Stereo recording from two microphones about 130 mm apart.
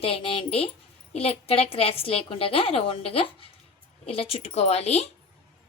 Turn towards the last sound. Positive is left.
turn(degrees=55)  # may be behind; listen again after turning